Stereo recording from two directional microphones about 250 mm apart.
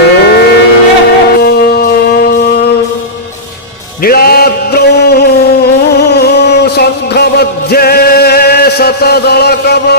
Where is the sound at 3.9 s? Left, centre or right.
Left.